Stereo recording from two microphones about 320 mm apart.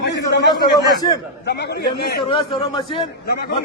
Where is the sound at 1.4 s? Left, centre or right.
Left.